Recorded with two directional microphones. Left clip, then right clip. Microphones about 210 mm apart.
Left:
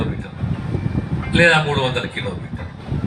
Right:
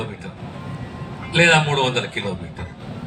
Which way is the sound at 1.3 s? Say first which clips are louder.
Left 1 dB; 55° right (ahead or behind).